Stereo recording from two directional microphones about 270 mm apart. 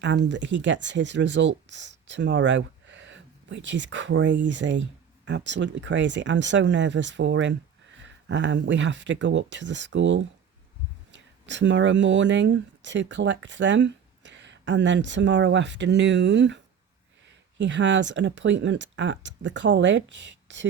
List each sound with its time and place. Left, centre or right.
0.3 s speech: right
17.6 s speech: right